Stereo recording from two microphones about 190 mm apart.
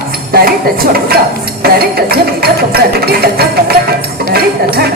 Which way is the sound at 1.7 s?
55° right (ahead or behind).